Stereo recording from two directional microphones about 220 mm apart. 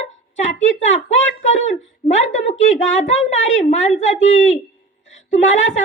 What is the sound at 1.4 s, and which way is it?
Speech, 35° left (ahead or behind).